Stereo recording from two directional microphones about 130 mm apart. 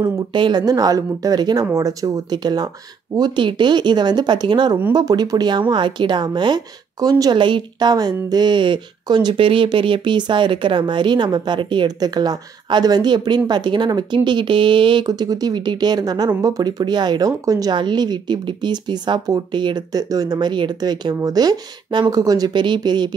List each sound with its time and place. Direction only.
0.0 s speech: 35° right (ahead or behind)